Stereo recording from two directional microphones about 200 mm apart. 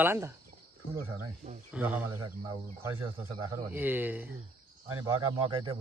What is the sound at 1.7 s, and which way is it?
A man's voice, 5° right (ahead or behind).